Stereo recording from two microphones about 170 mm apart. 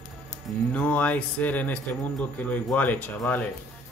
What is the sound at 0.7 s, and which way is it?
Speech, 10° left (ahead or behind).